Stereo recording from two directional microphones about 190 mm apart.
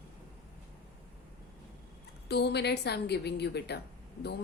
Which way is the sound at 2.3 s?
60° left (ahead or behind).